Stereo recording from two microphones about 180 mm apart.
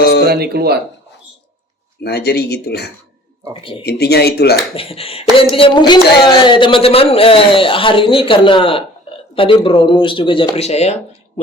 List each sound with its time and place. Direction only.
0.3 s speech: 60° right (ahead or behind)
2.0 s speech: 65° left (ahead or behind)
3.5 s speech: 30° left (ahead or behind)
3.8 s speech: 65° left (ahead or behind)
4.7 s speech: 30° left (ahead or behind)